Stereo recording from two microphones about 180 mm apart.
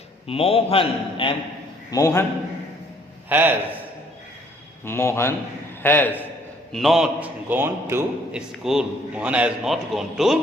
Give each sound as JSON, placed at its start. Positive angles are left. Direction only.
{"t": 0.3, "sound": "a man's voice", "side_deg": 35}
{"t": 1.9, "sound": "a man's voice", "side_deg": 20}
{"t": 3.2, "sound": "a man's voice", "side_deg": -10}
{"t": 4.9, "sound": "a man's voice", "side_deg": 15}
{"t": 6.7, "sound": "a man's voice", "side_deg": 0}